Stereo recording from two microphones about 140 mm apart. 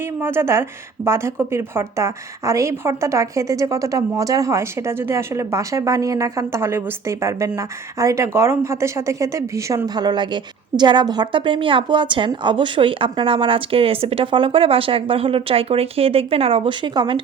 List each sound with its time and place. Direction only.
0.2 s a woman's voice: 15° right (ahead or behind); by 17.2 s 35° right (ahead or behind)